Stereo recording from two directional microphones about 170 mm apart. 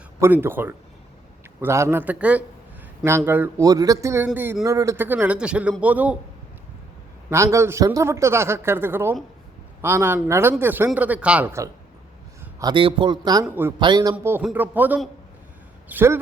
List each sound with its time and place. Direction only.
0.2 s a man's voice: 10° right (ahead or behind)
7.3 s a man's voice: 15° right (ahead or behind)
12.5 s speech: 25° right (ahead or behind)
13.4 s a man's voice: 10° right (ahead or behind)
13.7 s a man's voice: 25° right (ahead or behind)